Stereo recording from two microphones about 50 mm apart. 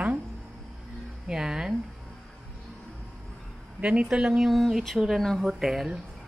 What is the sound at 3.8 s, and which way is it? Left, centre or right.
Speech, right.